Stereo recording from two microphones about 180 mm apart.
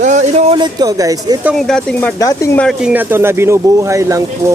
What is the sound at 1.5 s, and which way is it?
Speech, centre (ahead or behind).